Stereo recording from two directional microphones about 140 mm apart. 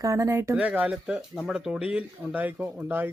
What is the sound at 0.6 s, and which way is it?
Speech, 10° right (ahead or behind).